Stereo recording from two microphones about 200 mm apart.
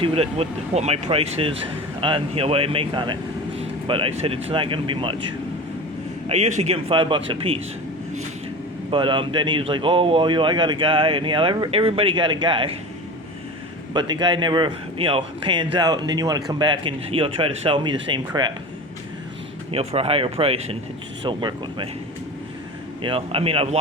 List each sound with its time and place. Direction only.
0.0 s a man's voice: 30° right (ahead or behind)
6.2 s a man's voice: 35° right (ahead or behind)
8.9 s a man's voice: 25° right (ahead or behind)
13.9 s a man's voice: 20° right (ahead or behind)
19.7 s a man's voice: 30° right (ahead or behind)
23.0 s a man's voice: 30° right (ahead or behind)